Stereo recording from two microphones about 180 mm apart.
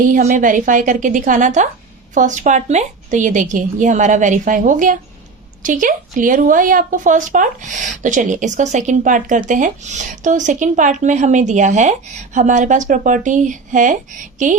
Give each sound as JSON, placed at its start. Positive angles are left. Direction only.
{"t": 0.0, "sound": "speech", "side_deg": -45}